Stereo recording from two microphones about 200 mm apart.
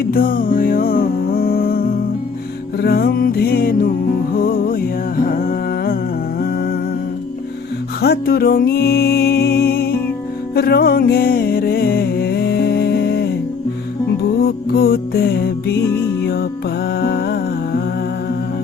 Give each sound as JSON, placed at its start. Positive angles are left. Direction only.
{"t": 0.1, "sound": "music", "side_deg": 45}
{"t": 6.4, "sound": "humming", "side_deg": 50}
{"t": 8.0, "sound": "music", "side_deg": 50}
{"t": 14.7, "sound": "music", "side_deg": 50}